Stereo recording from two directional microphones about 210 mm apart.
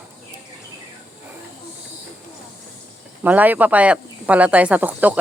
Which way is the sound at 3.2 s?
10° right (ahead or behind).